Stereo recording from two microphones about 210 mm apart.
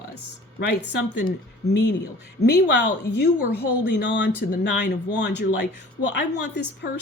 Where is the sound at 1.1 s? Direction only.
45° left (ahead or behind).